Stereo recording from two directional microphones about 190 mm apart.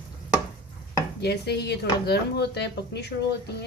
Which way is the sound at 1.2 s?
60° left (ahead or behind).